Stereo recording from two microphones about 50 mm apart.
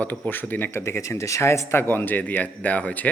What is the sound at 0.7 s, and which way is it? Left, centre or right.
Speech, left.